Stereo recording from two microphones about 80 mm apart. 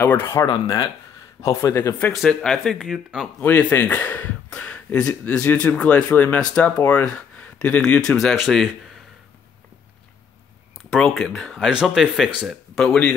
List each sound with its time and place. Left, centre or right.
0.0 s speech: left
0.5 s speech: left
1.4 s a man's voice: left
2.1 s speech: centre
3.3 s speech: left; by 8.6 s centre
11.0 s speech: centre
11.7 s speech: centre
12.7 s speech: centre